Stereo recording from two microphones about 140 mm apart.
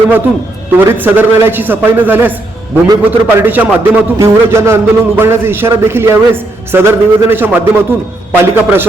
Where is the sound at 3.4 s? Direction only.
15° right (ahead or behind).